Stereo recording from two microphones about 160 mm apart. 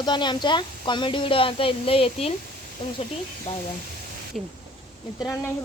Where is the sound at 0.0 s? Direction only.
30° left (ahead or behind).